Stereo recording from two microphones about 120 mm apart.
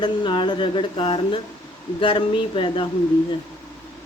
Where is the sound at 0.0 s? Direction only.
40° left (ahead or behind).